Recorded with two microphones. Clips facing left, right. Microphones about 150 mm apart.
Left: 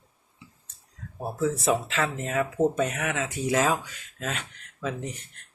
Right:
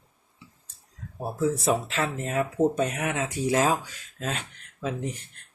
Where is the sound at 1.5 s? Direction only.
Centre (ahead or behind).